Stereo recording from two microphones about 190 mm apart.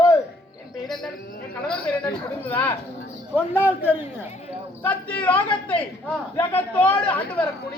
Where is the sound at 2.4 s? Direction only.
10° left (ahead or behind).